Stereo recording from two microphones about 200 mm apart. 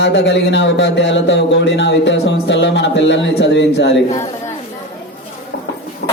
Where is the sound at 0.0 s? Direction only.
60° left (ahead or behind).